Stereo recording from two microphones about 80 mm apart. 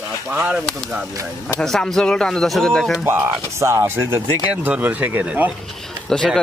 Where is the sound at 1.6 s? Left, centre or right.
Centre.